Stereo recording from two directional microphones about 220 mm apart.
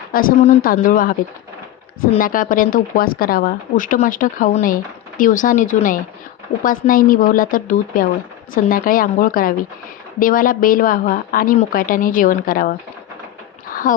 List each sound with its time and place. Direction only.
0.1 s speech: 40° left (ahead or behind)
2.1 s speech: 40° left (ahead or behind)
13.9 s speech: 40° left (ahead or behind)